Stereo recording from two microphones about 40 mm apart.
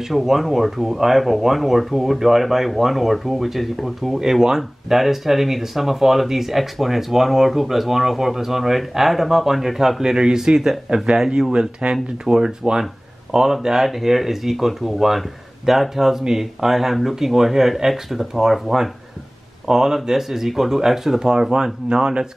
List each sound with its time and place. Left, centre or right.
0.1 s speech: centre
4.2 s speech: centre
10.1 s speech: right